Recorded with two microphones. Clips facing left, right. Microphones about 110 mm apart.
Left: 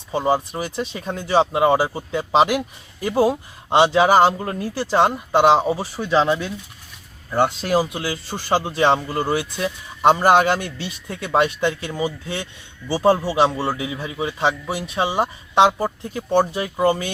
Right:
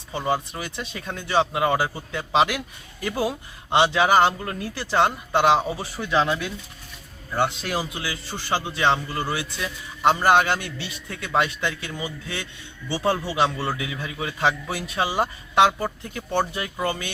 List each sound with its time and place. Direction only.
0.1 s a man's voice: 35° left (ahead or behind)
4.6 s a man's voice: 35° left (ahead or behind)
7.6 s a man's voice: 40° left (ahead or behind)